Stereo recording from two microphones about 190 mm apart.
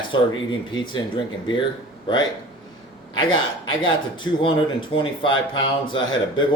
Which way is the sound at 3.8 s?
25° left (ahead or behind).